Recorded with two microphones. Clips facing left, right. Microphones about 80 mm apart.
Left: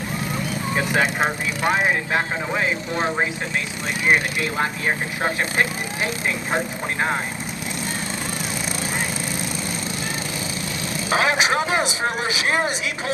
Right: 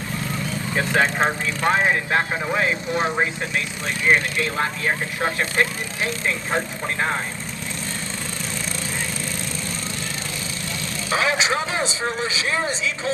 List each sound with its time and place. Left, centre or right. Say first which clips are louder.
0.9 s speech: right 2 dB; centre
4.0 s speech: even; centre
11.1 s speech: left 2 dB; left